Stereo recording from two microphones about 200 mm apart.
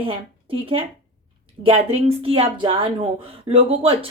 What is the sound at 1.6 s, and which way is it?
Speech, 30° right (ahead or behind).